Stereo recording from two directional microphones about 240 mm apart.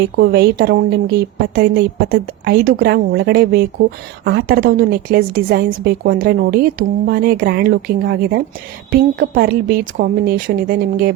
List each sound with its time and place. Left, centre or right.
0.2 s a woman's voice: right